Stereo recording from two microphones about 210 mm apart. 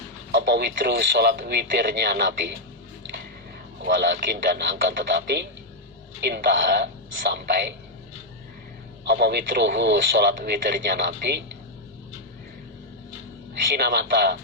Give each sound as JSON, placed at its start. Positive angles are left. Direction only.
{"t": 0.3, "sound": "speech", "side_deg": -55}
{"t": 3.8, "sound": "speech", "side_deg": -55}
{"t": 9.0, "sound": "speech", "side_deg": -50}
{"t": 13.7, "sound": "speech", "side_deg": -50}